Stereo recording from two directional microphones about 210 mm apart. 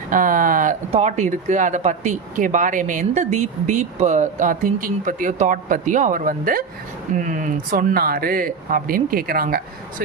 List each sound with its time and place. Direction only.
0.1 s speech: 40° right (ahead or behind)